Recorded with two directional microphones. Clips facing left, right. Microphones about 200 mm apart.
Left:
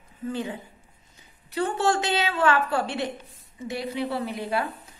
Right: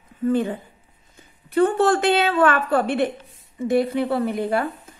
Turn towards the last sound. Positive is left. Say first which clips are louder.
# right 6 dB
turn(degrees=-50)  # may be behind; listen again after turning